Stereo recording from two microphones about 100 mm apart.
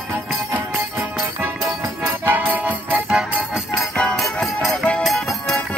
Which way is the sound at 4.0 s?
5° left (ahead or behind).